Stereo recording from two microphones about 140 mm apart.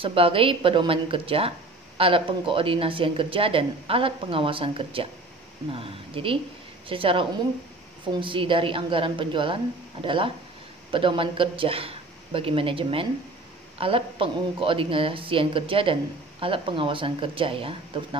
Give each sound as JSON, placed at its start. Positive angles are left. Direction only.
{"t": 0.0, "sound": "a woman's voice", "side_deg": -40}